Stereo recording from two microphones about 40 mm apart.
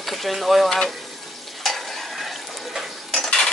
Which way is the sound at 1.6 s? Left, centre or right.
Centre.